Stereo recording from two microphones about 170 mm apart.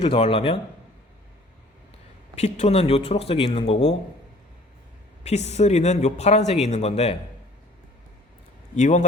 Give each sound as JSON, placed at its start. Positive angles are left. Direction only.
{"t": 0.0, "sound": "speech", "side_deg": 30}
{"t": 2.3, "sound": "speech", "side_deg": 40}
{"t": 5.2, "sound": "speech", "side_deg": 40}
{"t": 8.7, "sound": "a man's voice", "side_deg": 45}